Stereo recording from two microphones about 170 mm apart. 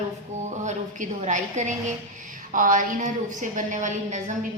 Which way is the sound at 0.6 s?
45° right (ahead or behind).